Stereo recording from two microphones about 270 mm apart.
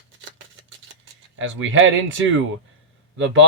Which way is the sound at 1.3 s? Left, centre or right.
Right.